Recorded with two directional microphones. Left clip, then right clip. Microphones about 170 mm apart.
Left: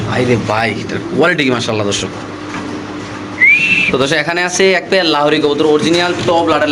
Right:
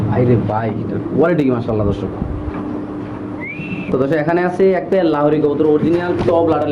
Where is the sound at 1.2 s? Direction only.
5° left (ahead or behind).